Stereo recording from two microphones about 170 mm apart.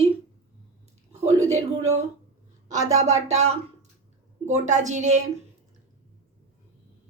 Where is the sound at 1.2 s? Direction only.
40° right (ahead or behind).